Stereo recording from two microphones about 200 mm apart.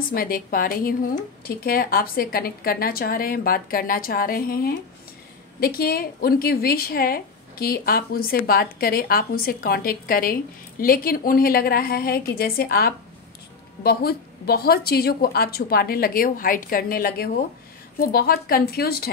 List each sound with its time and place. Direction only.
0.1 s a woman's voice: 45° left (ahead or behind)